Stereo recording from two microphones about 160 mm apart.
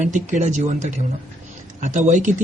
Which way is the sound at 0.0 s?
50° right (ahead or behind).